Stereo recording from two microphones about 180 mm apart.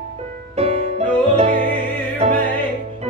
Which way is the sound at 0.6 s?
35° right (ahead or behind).